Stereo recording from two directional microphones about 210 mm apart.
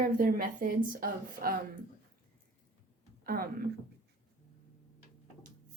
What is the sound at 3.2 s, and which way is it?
Speech, 45° right (ahead or behind).